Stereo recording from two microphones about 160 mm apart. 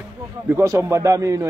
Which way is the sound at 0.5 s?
20° right (ahead or behind).